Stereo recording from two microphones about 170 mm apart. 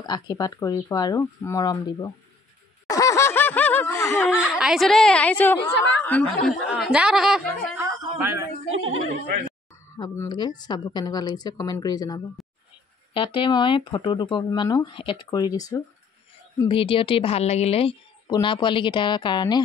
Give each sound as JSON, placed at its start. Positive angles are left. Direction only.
{"t": 0.0, "sound": "speech", "side_deg": 20}
{"t": 2.9, "sound": "snicker", "side_deg": 20}
{"t": 4.2, "sound": "a woman's voice", "side_deg": 0}
{"t": 6.7, "sound": "a woman's voice", "side_deg": -5}
{"t": 7.8, "sound": "a sound", "side_deg": -20}
{"t": 9.9, "sound": "speech", "side_deg": 25}
{"t": 12.4, "sound": "a sound", "side_deg": 0}
{"t": 13.1, "sound": "a woman's voice", "side_deg": 30}
{"t": 18.2, "sound": "speech", "side_deg": 25}